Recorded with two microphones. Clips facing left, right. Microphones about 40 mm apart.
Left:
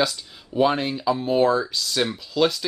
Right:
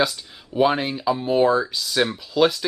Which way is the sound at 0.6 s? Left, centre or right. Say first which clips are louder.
Right 1 dB; centre.